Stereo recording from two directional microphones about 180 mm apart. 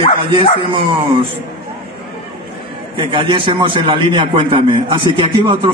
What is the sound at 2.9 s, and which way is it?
A man's voice, 30° right (ahead or behind).